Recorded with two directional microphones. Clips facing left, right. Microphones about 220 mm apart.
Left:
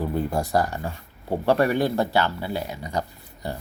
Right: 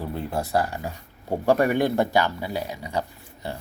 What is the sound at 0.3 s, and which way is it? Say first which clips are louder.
Speech: left 1 dB; 5° right (ahead or behind).